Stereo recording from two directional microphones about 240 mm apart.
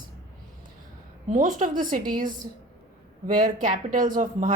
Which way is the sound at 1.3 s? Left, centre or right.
Right.